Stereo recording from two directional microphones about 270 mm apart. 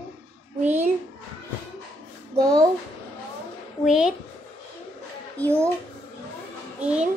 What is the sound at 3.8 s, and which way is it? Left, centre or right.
Speech, centre.